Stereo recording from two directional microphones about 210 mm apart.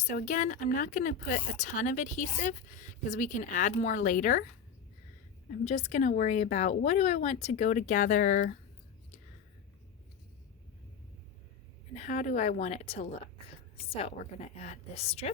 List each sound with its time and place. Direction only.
0.1 s speech: 35° left (ahead or behind)
5.6 s speech: 30° left (ahead or behind)
11.9 s a woman's voice: 40° left (ahead or behind)